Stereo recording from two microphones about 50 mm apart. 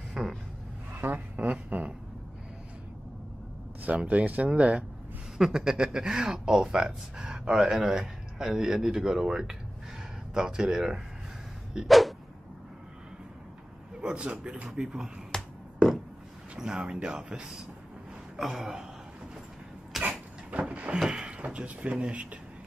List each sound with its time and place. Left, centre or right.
0.2 s speech: centre
0.9 s speech: right
3.8 s speech: right
5.4 s speech: centre
11.9 s dog: centre
14.0 s speech: centre
15.3 s finger snapping: centre
16.5 s speech: centre
20.0 s a sound: right
21.1 s speech: centre